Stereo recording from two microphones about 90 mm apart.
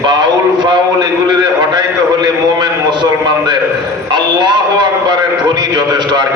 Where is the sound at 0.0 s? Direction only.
55° right (ahead or behind).